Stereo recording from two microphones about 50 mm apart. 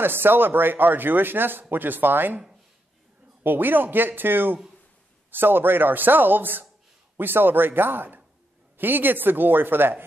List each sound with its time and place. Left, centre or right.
0.0 s speech: right
3.4 s a man's voice: right